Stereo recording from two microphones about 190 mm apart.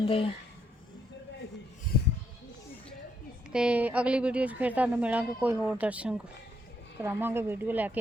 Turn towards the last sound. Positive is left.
turn(degrees=-10)  # may be behind; listen again after turning